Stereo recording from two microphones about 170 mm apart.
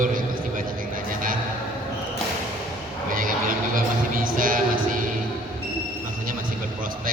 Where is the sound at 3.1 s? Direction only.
55° right (ahead or behind).